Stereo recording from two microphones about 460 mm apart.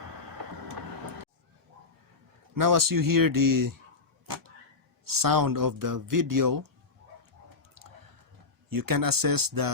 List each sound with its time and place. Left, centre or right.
2.6 s speech: right
5.0 s speech: right
8.7 s speech: right